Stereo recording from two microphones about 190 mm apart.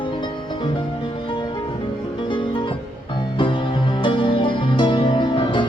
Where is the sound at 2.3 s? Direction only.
25° left (ahead or behind).